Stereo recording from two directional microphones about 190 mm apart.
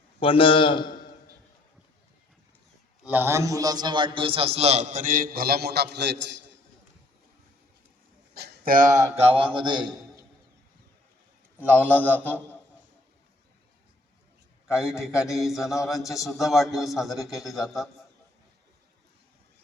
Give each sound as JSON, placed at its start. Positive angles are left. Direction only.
{"t": 0.2, "sound": "a man's voice", "side_deg": 30}
{"t": 3.0, "sound": "a man's voice", "side_deg": -10}
{"t": 8.4, "sound": "speech", "side_deg": -50}
{"t": 9.4, "sound": "a man's voice", "side_deg": -25}
{"t": 11.6, "sound": "a man's voice", "side_deg": -10}
{"t": 14.7, "sound": "a man's voice", "side_deg": -5}